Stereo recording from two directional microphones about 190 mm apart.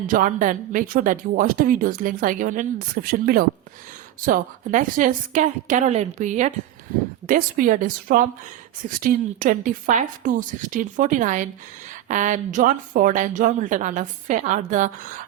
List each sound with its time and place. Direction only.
0.1 s a woman's voice: 45° right (ahead or behind)